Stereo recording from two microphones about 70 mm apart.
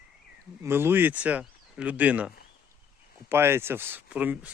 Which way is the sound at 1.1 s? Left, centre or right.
Centre.